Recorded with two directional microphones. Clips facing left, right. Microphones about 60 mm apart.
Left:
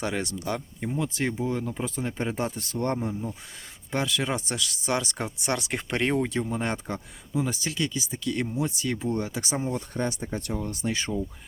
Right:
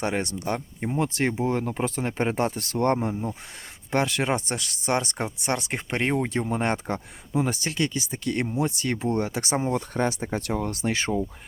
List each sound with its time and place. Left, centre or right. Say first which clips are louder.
0.0 s speech: right 3 dB; right
1.0 s speech: right 4 dB; right
2.6 s speech: right 5 dB; right
6.2 s speech: right 3 dB; right
10.5 s speech: right 3 dB; right